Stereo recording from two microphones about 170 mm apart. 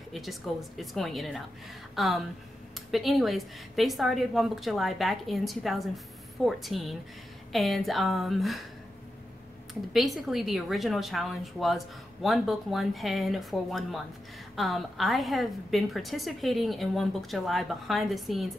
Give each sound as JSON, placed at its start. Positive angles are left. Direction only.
{"t": 0.1, "sound": "a woman's voice", "side_deg": 0}
{"t": 9.9, "sound": "a woman's voice", "side_deg": 0}